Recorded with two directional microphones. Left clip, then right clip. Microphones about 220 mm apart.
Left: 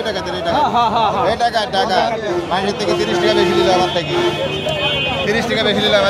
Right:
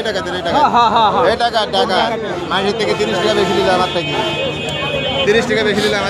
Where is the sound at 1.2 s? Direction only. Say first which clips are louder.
Right 2 dB; 10° right (ahead or behind).